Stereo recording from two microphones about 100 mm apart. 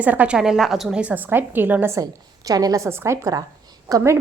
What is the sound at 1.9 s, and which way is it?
A woman's voice, 35° right (ahead or behind).